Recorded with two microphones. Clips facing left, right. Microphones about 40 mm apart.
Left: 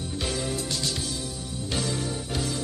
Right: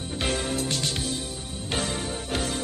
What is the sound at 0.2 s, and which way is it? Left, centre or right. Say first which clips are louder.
Music: right 3 dB; right.